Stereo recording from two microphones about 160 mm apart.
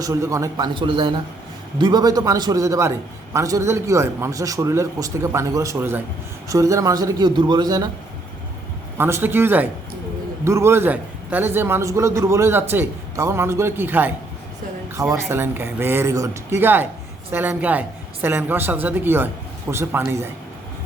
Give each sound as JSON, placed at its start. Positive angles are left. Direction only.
{"t": 0.0, "sound": "a man's voice", "side_deg": -20}
{"t": 9.0, "sound": "a man's voice", "side_deg": -15}
{"t": 15.1, "sound": "a man's voice", "side_deg": -15}